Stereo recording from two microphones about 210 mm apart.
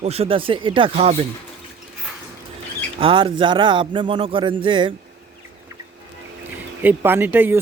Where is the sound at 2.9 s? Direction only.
25° right (ahead or behind).